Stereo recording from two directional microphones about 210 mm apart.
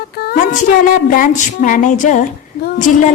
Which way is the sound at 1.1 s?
40° left (ahead or behind).